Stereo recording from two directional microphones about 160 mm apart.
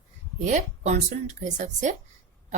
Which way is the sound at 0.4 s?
50° right (ahead or behind).